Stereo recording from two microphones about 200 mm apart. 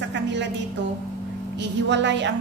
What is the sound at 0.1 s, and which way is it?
Music, 60° right (ahead or behind).